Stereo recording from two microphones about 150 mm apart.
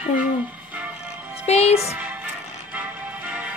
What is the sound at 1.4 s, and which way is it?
Music, 45° left (ahead or behind).